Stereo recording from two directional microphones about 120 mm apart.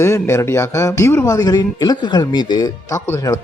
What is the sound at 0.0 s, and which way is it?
Speech, 25° left (ahead or behind).